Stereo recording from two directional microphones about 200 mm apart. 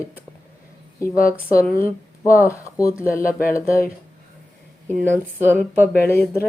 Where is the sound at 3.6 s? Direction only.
15° left (ahead or behind).